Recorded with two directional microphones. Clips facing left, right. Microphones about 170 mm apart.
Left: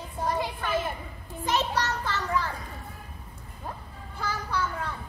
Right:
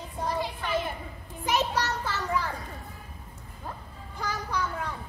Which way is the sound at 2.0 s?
15° right (ahead or behind).